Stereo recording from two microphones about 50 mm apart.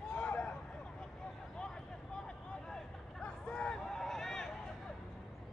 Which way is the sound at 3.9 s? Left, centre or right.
Centre.